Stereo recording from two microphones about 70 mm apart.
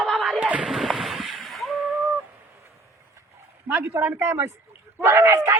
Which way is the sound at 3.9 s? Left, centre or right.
Right.